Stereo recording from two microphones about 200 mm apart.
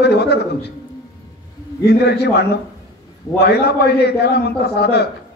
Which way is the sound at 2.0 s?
55° left (ahead or behind).